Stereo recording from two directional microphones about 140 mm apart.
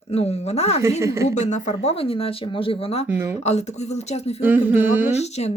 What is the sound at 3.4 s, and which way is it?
Speech, 55° left (ahead or behind).